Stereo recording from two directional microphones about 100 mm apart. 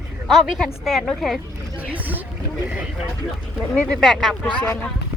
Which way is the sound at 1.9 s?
15° right (ahead or behind).